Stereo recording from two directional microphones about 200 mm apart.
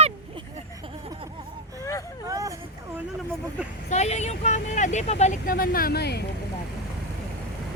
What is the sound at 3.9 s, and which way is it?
Vehicle, 35° left (ahead or behind).